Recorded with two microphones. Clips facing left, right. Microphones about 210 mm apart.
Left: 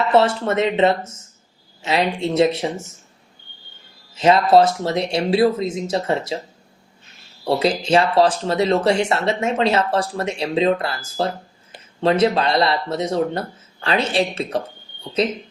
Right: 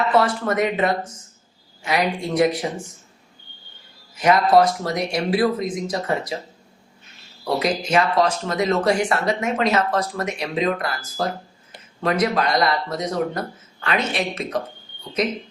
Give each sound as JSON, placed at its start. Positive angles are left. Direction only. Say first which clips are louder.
{"t": 0.1, "sound": "speech", "louder": "left 3 dB", "side_deg": 25}
{"t": 4.1, "sound": "speech", "louder": "left 2 dB", "side_deg": 25}
{"t": 7.4, "sound": "speech", "louder": "left 3 dB", "side_deg": 30}